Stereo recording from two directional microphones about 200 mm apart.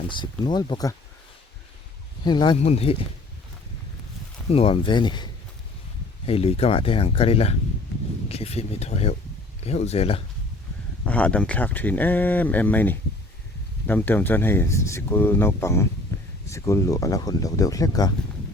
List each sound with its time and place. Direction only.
0.1 s speech: 20° left (ahead or behind)
2.2 s speech: 20° left (ahead or behind)
4.4 s speech: 30° left (ahead or behind)
11.0 s speech: 5° left (ahead or behind)
16.1 s a sound: 15° left (ahead or behind)
16.5 s speech: 15° left (ahead or behind)